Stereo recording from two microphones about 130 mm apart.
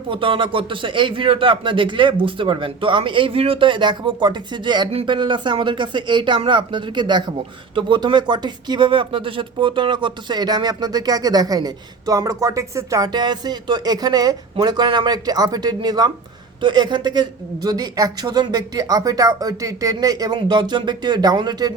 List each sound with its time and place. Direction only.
0.1 s speech: 40° right (ahead or behind)